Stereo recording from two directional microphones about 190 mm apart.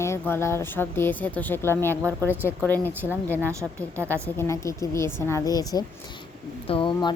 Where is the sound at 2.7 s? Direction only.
10° left (ahead or behind).